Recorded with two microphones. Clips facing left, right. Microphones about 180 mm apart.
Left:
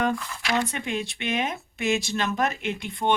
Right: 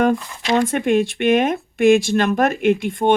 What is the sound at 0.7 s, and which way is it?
Speech, 50° right (ahead or behind).